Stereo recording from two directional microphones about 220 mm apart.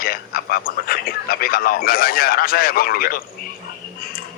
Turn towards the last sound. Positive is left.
turn(degrees=40)  # may be behind; listen again after turning